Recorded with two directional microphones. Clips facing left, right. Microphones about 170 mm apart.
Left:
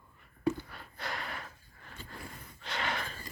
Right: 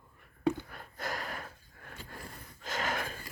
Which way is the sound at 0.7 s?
50° right (ahead or behind).